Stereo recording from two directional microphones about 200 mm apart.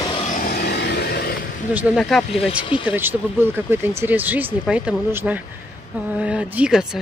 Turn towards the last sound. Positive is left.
turn(degrees=-5)  # may be behind; listen again after turning